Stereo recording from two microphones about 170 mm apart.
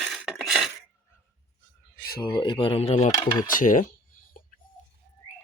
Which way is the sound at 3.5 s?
50° left (ahead or behind).